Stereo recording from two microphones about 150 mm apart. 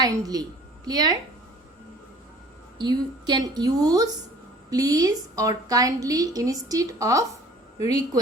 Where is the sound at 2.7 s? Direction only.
30° right (ahead or behind).